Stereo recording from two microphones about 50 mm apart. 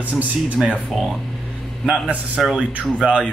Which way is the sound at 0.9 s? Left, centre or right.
Centre.